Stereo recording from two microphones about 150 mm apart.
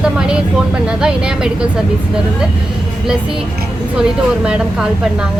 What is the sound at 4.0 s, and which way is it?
Speech, 5° right (ahead or behind).